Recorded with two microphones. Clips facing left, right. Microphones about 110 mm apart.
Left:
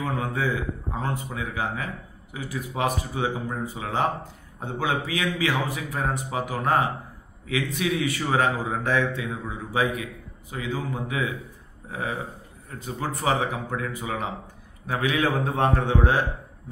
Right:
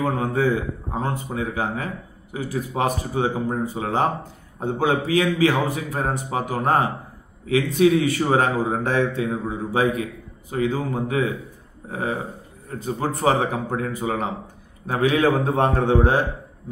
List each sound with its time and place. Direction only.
0.0 s a man's voice: 40° right (ahead or behind)